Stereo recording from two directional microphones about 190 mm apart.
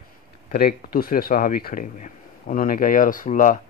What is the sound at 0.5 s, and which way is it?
Speech, 50° left (ahead or behind).